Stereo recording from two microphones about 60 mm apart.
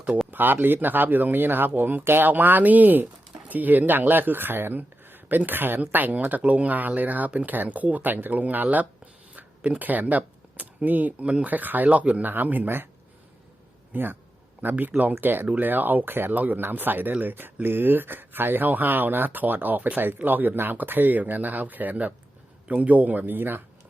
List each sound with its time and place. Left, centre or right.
0.3 s speech: right
13.9 s speech: right